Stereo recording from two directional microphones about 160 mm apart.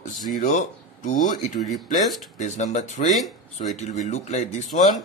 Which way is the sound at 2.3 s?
50° left (ahead or behind).